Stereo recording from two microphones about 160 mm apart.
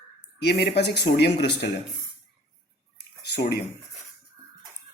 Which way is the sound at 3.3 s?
90° left.